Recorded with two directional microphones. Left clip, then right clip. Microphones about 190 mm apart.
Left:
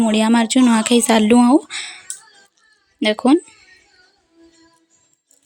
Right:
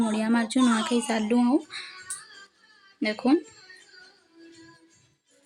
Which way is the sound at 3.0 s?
40° left (ahead or behind).